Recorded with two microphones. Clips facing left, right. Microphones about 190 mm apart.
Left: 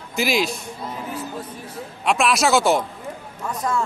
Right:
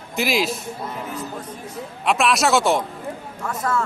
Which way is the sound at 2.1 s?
Centre (ahead or behind).